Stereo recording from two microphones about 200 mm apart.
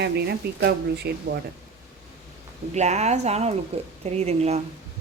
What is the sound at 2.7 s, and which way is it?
Speech, 35° right (ahead or behind).